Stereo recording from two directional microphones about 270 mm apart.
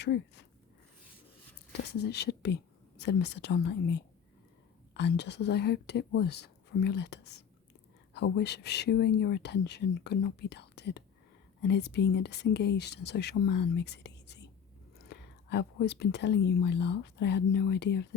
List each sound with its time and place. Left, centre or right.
0.0 s speech: left
1.9 s speech: left